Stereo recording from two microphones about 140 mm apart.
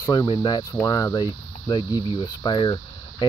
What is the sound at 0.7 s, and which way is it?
Speech, 20° left (ahead or behind).